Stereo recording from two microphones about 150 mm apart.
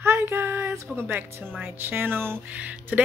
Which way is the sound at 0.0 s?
15° right (ahead or behind).